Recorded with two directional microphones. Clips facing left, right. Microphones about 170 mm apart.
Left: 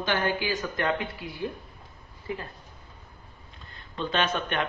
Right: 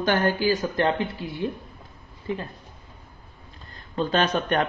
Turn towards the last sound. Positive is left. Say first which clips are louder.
# right 5 dB
turn(degrees=-40)  # may be behind; listen again after turning